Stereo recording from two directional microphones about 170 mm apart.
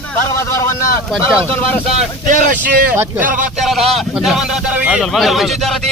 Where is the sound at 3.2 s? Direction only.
50° right (ahead or behind).